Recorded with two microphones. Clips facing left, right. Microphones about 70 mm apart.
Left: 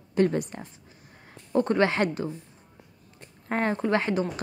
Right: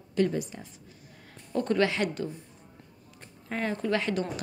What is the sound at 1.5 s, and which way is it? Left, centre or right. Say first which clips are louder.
Speech: left 3 dB; left.